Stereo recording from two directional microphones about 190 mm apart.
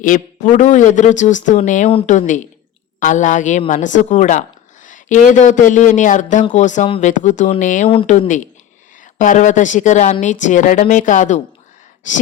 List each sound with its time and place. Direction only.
0.0 s a woman's voice: 45° left (ahead or behind)